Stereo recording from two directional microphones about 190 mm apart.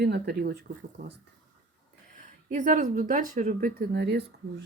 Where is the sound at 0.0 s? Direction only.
60° right (ahead or behind).